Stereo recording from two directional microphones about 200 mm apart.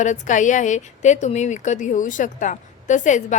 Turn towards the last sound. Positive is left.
turn(degrees=40)  # may be behind; listen again after turning